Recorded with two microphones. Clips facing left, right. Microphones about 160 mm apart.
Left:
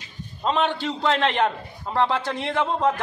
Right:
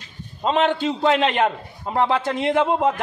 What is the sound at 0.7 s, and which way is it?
A man's voice, 20° right (ahead or behind).